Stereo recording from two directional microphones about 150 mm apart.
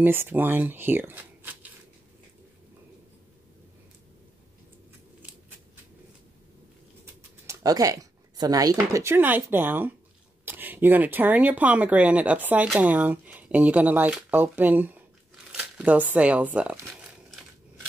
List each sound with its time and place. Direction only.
0.0 s speech: 15° right (ahead or behind)
7.4 s speech: 25° right (ahead or behind)